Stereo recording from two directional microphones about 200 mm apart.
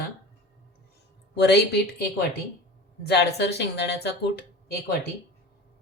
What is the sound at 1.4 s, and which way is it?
A woman's voice, 55° left (ahead or behind).